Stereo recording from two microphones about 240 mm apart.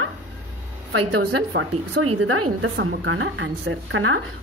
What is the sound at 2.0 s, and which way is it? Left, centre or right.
Speech, right.